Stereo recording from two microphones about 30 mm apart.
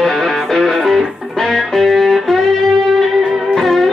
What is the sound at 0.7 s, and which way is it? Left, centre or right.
Music, centre.